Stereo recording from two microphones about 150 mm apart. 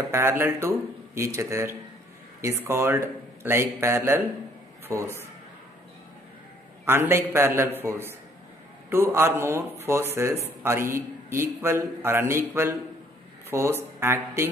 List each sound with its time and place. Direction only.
0.1 s a man's voice: 15° right (ahead or behind)
6.9 s a man's voice: 15° right (ahead or behind)